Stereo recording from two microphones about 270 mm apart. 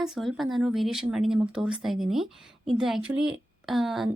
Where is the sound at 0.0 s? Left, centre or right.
Centre.